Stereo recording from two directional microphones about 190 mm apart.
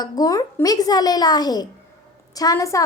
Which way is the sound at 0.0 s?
20° left (ahead or behind).